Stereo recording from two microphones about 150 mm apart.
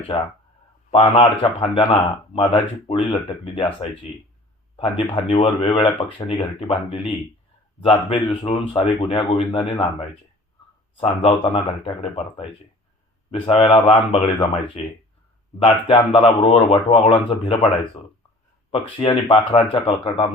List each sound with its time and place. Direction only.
0.9 s speech: 40° left (ahead or behind)
10.9 s speech: 40° left (ahead or behind)
18.7 s speech: 40° left (ahead or behind)